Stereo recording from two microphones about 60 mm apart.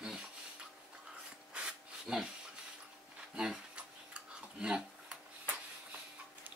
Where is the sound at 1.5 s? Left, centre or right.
Centre.